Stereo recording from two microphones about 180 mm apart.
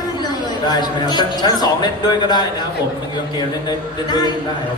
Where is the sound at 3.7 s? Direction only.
25° left (ahead or behind).